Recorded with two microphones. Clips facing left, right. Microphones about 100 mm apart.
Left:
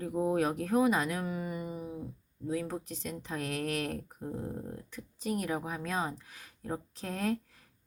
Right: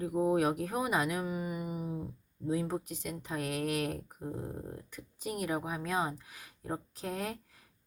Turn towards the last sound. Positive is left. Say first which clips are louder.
# left 5 dB
turn(degrees=-10)  # may be behind; listen again after turning